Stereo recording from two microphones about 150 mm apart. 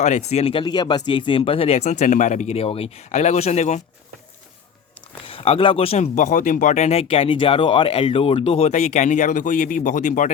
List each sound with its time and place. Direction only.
0.0 s speech: 50° left (ahead or behind)
5.2 s speech: 40° left (ahead or behind); by 10.3 s 55° left (ahead or behind)